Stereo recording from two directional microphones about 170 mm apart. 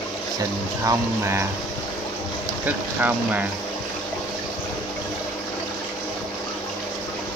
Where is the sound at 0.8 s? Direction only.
15° right (ahead or behind).